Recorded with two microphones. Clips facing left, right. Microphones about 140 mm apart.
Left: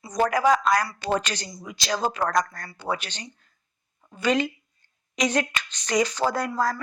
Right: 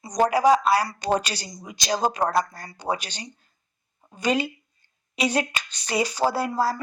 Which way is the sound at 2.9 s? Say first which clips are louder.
Right 1 dB; 10° right (ahead or behind).